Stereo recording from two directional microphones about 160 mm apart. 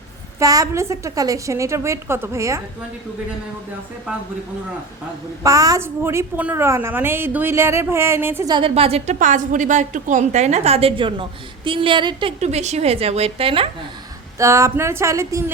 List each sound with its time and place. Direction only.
0.3 s a woman's voice: 20° right (ahead or behind)
5.4 s a woman's voice: 20° right (ahead or behind)
8.4 s a woman's voice: 30° right (ahead or behind)
9.1 s a woman's voice: 50° right (ahead or behind); by 12.3 s 30° right (ahead or behind)
12.4 s a woman's voice: 45° right (ahead or behind)
14.3 s a woman's voice: 20° right (ahead or behind)